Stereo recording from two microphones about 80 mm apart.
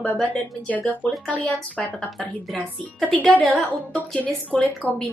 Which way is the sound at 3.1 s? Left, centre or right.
Centre.